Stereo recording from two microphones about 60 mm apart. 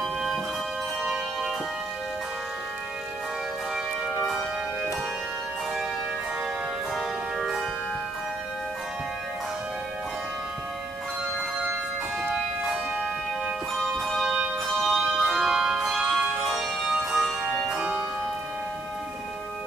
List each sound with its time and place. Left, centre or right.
0.0 s music: centre
1.0 s music: centre
7.0 s music: centre
14.2 s music: centre
14.9 s music: centre
15.4 s music: centre